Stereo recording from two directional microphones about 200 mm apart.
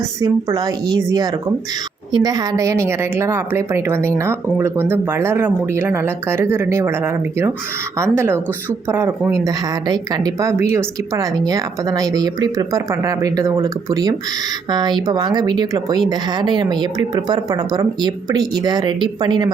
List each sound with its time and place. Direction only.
0.2 s a woman's voice: 20° right (ahead or behind)